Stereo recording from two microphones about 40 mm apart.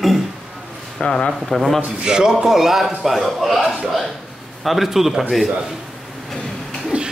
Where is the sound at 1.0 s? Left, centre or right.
Centre.